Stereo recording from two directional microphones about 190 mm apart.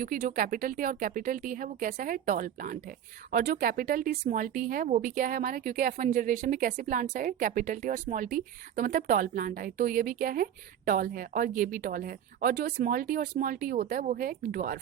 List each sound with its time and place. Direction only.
0.0 s speech: 45° right (ahead or behind)